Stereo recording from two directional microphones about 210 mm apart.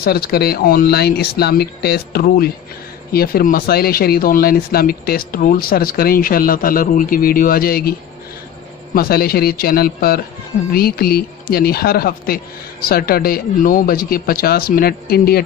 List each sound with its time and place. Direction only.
0.0 s speech: 50° left (ahead or behind)
8.9 s speech: 45° left (ahead or behind)